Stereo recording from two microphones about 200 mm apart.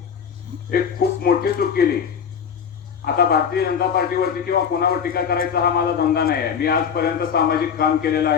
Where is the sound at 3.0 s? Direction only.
50° left (ahead or behind).